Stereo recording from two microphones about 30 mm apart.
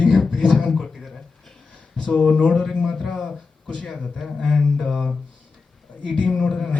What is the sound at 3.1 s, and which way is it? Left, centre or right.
Speech, left.